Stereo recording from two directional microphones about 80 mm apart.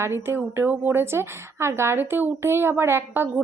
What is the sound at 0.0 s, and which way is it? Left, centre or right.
A woman's voice, right.